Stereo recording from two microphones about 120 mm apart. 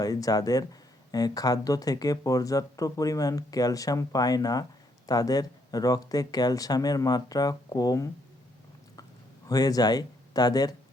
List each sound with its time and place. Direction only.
0.0 s speech: 30° left (ahead or behind)
9.5 s speech: 30° left (ahead or behind)